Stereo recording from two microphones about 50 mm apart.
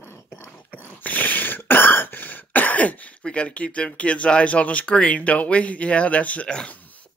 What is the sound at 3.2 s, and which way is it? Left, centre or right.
Speech, left.